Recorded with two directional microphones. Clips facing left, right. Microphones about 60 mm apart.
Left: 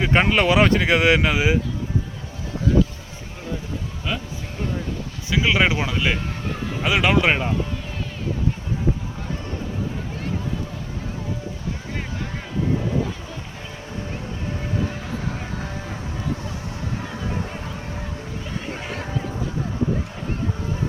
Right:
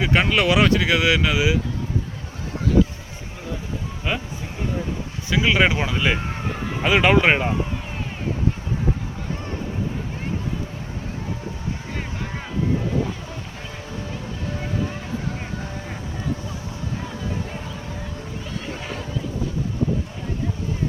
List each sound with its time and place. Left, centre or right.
0.0 s speech: left
4.1 s speech: centre
5.3 s speech: centre